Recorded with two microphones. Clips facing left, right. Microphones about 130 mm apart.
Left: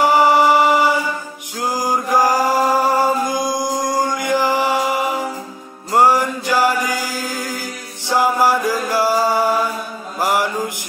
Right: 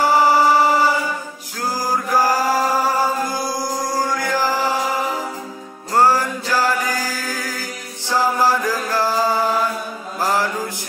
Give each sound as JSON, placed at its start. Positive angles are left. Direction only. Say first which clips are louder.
{"t": 0.0, "sound": "chant", "louder": "left 2 dB", "side_deg": 20}
{"t": 10.1, "sound": "mantra", "louder": "left 2 dB", "side_deg": 15}